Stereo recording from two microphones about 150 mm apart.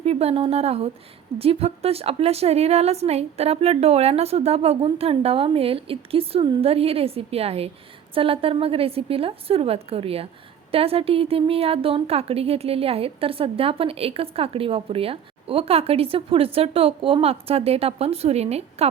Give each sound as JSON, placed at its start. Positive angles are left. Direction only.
{"t": 0.0, "sound": "a woman's voice", "side_deg": -45}